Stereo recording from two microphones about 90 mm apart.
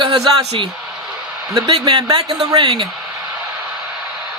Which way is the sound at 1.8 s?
50° right (ahead or behind).